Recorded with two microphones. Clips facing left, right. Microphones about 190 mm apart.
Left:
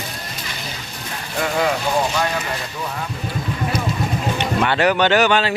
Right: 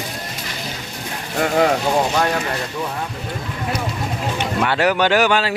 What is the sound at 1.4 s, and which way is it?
Speech, 45° right (ahead or behind).